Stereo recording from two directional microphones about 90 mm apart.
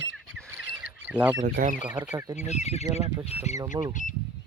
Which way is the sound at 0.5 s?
20° right (ahead or behind).